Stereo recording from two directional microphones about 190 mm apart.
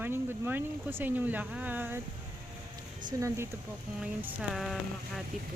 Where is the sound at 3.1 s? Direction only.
20° right (ahead or behind).